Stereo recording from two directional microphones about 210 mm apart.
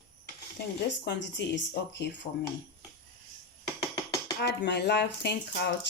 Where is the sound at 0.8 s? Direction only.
55° left (ahead or behind).